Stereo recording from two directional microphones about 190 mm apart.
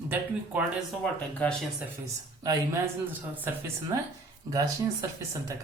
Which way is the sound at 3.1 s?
10° right (ahead or behind).